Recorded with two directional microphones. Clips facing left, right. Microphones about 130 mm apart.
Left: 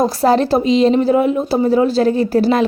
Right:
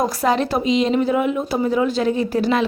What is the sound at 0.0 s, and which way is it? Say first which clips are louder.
A woman's voice: left 5 dB; 30° left (ahead or behind).